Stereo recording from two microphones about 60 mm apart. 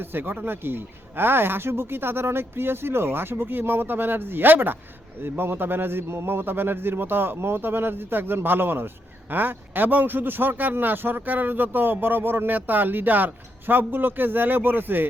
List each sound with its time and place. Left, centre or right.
0.0 s speech: right